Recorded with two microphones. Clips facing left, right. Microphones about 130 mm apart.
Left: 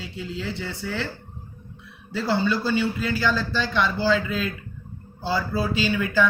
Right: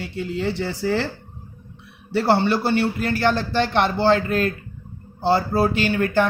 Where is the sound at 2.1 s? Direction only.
70° right (ahead or behind).